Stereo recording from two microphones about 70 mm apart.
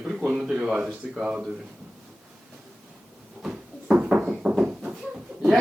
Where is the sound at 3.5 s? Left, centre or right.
Centre.